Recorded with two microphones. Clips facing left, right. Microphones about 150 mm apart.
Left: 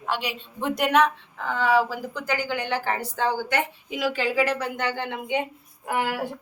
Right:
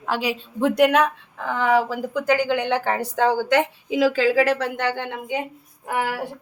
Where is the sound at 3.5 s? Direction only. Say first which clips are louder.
Right 7 dB; 90° right; by 5.0 s 60° right (ahead or behind).